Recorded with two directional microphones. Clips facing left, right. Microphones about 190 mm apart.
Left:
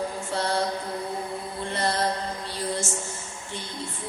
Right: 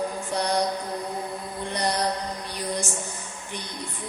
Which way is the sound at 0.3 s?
15° right (ahead or behind).